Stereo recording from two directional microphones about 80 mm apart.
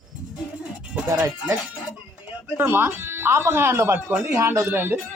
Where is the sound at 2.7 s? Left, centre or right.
Right.